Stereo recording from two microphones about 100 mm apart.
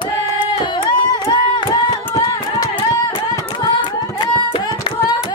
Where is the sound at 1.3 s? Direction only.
50° left (ahead or behind).